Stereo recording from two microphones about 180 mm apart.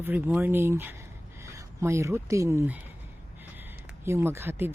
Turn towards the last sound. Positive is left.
turn(degrees=-15)  # may be behind; listen again after turning